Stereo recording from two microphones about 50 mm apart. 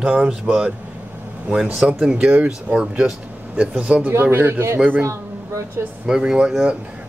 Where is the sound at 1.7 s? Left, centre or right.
Centre.